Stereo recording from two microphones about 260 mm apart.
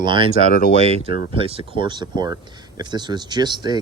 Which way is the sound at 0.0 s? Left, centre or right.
Centre.